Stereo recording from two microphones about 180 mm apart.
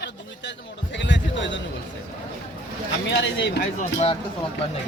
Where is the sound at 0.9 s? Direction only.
85° left.